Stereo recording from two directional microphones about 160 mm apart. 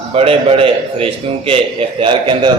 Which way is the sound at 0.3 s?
35° right (ahead or behind).